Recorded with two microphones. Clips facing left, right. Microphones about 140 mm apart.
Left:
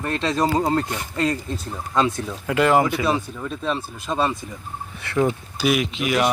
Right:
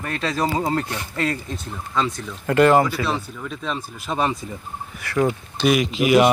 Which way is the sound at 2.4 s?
5° left (ahead or behind).